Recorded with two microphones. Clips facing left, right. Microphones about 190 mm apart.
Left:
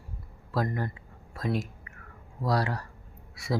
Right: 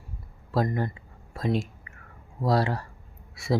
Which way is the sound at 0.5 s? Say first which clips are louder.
Right 4 dB; 25° right (ahead or behind).